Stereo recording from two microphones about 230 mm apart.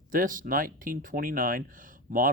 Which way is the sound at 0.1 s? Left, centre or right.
Right.